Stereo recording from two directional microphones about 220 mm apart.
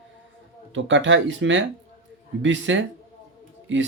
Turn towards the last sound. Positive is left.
turn(degrees=-55)  # may be behind; listen again after turning